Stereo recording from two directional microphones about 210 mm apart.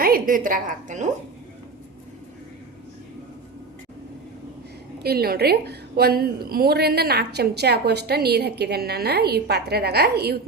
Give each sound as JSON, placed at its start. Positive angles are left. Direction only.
{"t": 0.0, "sound": "a woman's voice", "side_deg": -40}
{"t": 5.0, "sound": "a woman's voice", "side_deg": -45}